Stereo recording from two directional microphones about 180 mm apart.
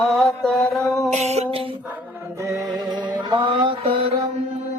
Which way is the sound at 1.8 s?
10° right (ahead or behind).